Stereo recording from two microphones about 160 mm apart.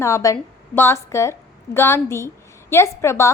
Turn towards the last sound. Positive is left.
turn(degrees=15)  # may be behind; listen again after turning